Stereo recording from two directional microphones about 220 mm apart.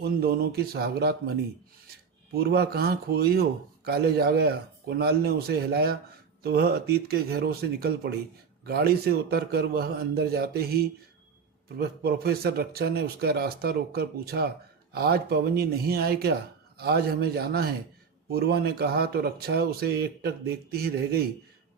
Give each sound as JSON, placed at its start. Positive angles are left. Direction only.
{"t": 0.0, "sound": "speech", "side_deg": -45}
{"t": 2.3, "sound": "speech", "side_deg": -45}